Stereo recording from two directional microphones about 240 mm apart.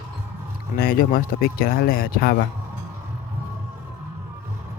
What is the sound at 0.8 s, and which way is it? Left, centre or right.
Speech, left.